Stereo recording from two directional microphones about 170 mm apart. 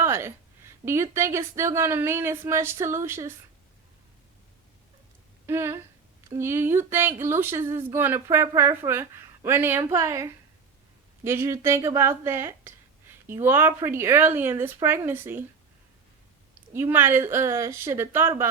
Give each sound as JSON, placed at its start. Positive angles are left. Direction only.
{"t": 0.0, "sound": "a sound", "side_deg": -15}
{"t": 0.9, "sound": "speech", "side_deg": -15}
{"t": 5.5, "sound": "speech", "side_deg": -15}
{"t": 16.7, "sound": "speech", "side_deg": -15}